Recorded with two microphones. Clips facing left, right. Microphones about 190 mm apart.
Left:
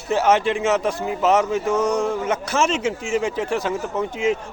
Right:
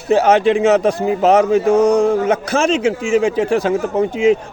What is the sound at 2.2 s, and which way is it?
A man's voice, 90° right.